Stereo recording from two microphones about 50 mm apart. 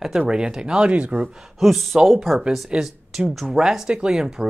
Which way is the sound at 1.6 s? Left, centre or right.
Centre.